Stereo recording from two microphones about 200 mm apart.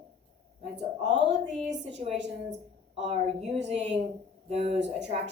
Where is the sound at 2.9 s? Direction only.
30° right (ahead or behind).